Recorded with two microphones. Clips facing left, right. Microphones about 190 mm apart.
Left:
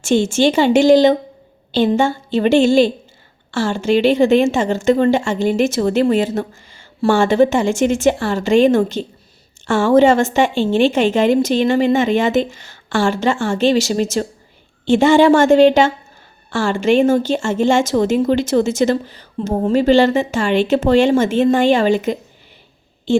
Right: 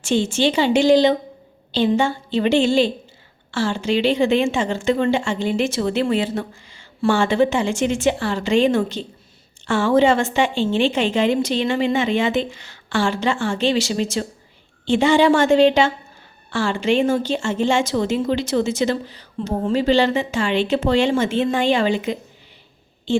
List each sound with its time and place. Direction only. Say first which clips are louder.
0.0 s a woman's voice: left 4 dB; 45° left (ahead or behind)